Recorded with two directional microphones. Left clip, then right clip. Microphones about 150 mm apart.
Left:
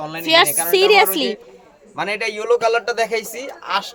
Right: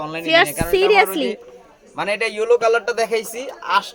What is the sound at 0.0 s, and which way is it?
Speech, 20° right (ahead or behind).